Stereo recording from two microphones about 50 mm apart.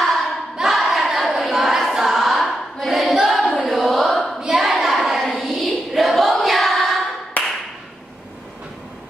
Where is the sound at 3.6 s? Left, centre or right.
Centre.